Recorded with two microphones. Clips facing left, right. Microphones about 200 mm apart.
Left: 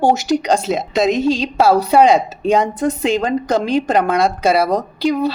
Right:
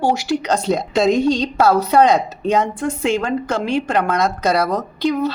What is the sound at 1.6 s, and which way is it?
Speech, 30° left (ahead or behind).